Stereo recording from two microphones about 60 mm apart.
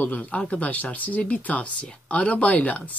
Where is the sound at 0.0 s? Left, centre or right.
Left.